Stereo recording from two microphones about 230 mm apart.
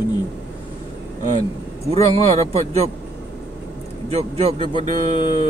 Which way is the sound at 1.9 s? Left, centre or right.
Right.